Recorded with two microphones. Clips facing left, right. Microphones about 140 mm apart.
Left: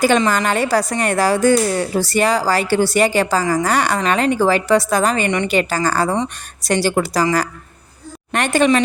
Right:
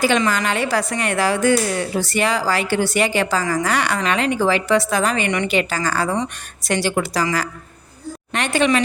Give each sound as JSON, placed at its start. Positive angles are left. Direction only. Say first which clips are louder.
{"t": 0.3, "sound": "a woman's voice", "louder": "left 3 dB", "side_deg": 45}